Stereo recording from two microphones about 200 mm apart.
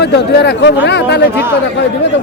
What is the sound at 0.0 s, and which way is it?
Speech, 55° left (ahead or behind).